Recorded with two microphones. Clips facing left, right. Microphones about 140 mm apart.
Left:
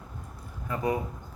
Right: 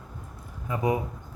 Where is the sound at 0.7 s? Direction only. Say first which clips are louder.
Right 2 dB; 20° right (ahead or behind).